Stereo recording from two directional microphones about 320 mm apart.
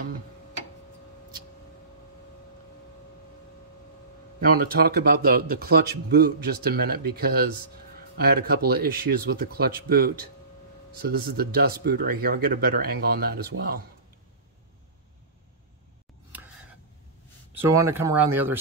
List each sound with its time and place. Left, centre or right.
4.4 s speech: right
17.6 s speech: centre